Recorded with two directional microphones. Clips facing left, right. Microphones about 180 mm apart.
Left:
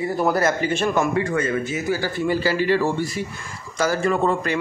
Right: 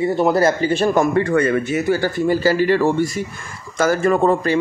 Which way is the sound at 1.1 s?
65° right (ahead or behind).